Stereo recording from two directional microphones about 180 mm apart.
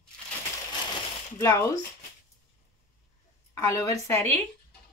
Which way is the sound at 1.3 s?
15° left (ahead or behind).